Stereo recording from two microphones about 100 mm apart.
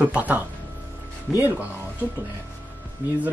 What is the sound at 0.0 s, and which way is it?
Speech, 15° right (ahead or behind).